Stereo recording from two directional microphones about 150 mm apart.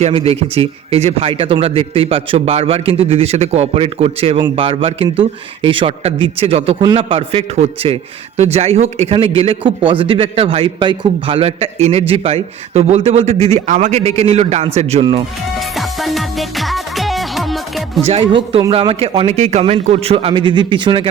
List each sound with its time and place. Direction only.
0.0 s a man's voice: 40° right (ahead or behind)
15.5 s music: centre (ahead or behind)
18.0 s a man's voice: 40° right (ahead or behind)